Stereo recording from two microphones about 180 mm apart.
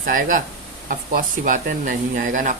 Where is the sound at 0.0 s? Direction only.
50° right (ahead or behind).